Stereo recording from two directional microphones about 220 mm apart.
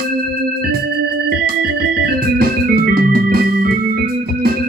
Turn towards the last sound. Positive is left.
turn(degrees=-45)  # may be behind; listen again after turning